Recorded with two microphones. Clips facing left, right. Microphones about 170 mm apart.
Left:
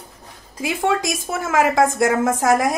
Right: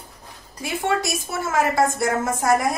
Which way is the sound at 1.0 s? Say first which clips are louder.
Left 2 dB; 90° left.